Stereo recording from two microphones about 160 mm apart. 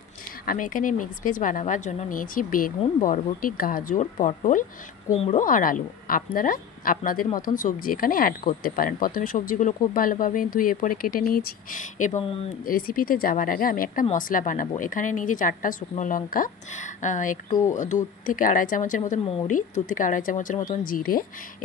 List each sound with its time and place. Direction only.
0.5 s speech: 55° left (ahead or behind)
5.4 s speech: 60° left (ahead or behind); by 12.4 s 40° left (ahead or behind)
12.6 s speech: 65° left (ahead or behind)